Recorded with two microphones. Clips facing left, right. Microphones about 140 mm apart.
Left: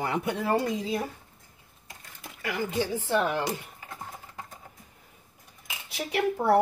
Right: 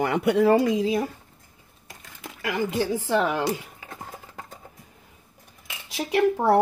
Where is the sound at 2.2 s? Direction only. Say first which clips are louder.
Right 5 dB; 90° right.